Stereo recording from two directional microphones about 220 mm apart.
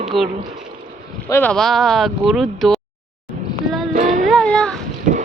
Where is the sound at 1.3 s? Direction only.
5° left (ahead or behind).